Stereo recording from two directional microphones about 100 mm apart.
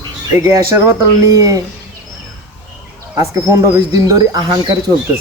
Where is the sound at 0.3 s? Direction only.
25° right (ahead or behind).